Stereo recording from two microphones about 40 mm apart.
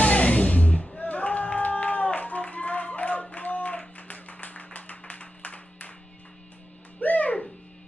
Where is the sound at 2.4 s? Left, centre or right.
Left.